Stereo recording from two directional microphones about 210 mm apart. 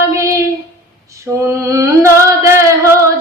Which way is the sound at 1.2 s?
15° right (ahead or behind).